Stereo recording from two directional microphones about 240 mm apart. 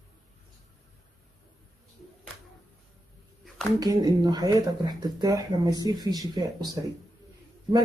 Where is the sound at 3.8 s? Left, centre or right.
Centre.